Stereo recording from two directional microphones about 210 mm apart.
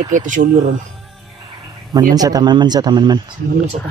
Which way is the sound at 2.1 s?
20° right (ahead or behind).